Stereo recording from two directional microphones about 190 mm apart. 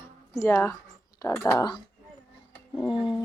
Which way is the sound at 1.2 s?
15° left (ahead or behind).